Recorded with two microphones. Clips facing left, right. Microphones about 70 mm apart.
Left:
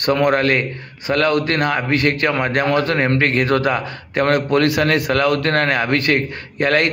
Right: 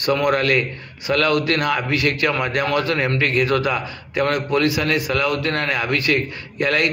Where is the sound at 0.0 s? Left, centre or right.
Left.